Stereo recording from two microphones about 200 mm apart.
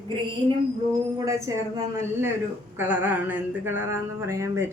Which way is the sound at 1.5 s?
15° right (ahead or behind).